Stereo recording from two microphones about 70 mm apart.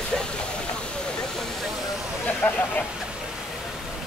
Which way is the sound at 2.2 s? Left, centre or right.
Left.